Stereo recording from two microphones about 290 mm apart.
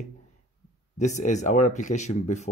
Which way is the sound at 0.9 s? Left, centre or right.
Left.